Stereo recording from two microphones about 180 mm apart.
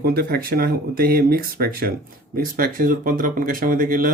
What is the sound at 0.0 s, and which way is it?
Speech, 60° right (ahead or behind).